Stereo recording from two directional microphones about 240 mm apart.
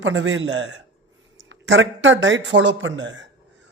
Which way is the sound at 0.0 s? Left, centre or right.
Right.